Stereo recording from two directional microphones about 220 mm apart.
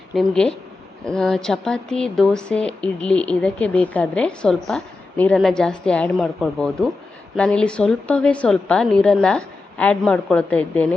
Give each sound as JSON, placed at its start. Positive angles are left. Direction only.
{"t": 0.1, "sound": "speech", "side_deg": 0}